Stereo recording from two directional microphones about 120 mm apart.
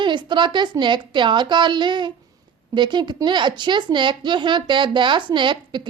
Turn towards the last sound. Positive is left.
turn(degrees=-40)  # may be behind; listen again after turning